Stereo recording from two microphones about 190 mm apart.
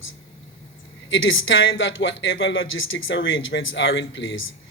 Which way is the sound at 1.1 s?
90° left.